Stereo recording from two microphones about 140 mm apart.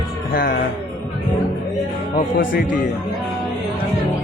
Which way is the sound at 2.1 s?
80° left.